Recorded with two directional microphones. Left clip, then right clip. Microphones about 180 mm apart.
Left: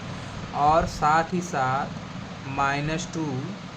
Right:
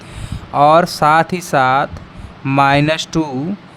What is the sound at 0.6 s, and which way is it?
Speech, 65° right (ahead or behind).